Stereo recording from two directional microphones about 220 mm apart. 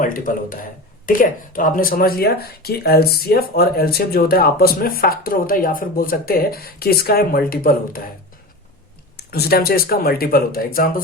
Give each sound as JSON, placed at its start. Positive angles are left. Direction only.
{"t": 0.0, "sound": "speech", "side_deg": 40}
{"t": 9.1, "sound": "speech", "side_deg": 45}